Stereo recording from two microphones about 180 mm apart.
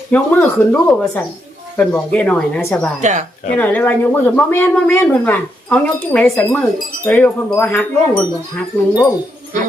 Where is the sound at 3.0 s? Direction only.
40° right (ahead or behind).